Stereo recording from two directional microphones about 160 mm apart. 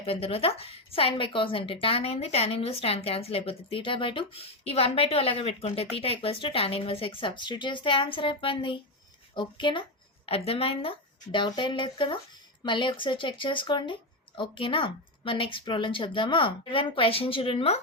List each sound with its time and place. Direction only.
0.0 s a woman's voice: 35° left (ahead or behind)